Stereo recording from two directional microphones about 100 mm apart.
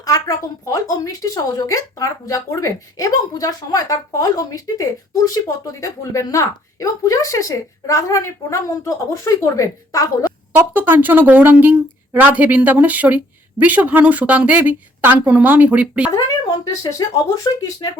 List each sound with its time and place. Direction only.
0.0 s speech: 35° left (ahead or behind)
10.8 s speech: 20° right (ahead or behind)
16.1 s speech: 40° left (ahead or behind)